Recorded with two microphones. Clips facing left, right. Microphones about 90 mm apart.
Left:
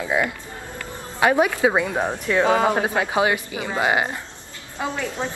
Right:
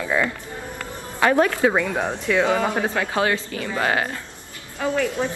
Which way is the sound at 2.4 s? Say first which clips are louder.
Left 2 dB; 30° left (ahead or behind).